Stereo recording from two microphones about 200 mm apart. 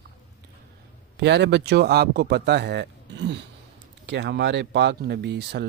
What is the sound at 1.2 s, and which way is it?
Speech, 60° right (ahead or behind).